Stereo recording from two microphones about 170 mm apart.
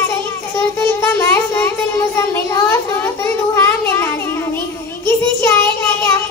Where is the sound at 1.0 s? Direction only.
15° left (ahead or behind).